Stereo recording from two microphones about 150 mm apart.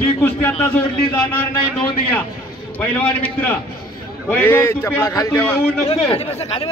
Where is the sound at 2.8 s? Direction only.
10° left (ahead or behind).